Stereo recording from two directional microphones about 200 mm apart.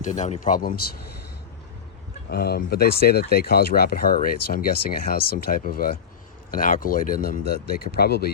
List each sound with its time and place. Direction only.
0.1 s speech: 40° left (ahead or behind)
2.3 s speech: 55° left (ahead or behind)